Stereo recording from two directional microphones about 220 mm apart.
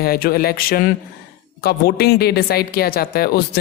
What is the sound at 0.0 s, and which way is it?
A woman's voice, 45° left (ahead or behind).